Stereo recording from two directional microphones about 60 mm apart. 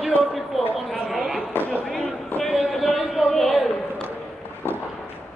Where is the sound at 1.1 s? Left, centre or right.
Centre.